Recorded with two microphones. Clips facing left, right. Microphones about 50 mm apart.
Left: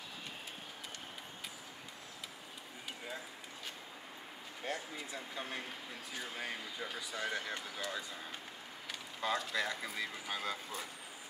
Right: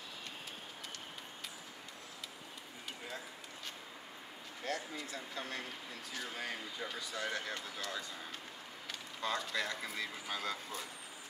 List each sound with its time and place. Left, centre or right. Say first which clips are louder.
4.6 s speech: right 1 dB; centre
9.2 s speech: left 2 dB; centre